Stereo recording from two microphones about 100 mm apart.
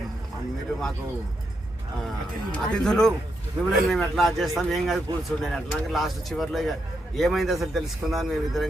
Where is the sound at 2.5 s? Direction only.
5° left (ahead or behind).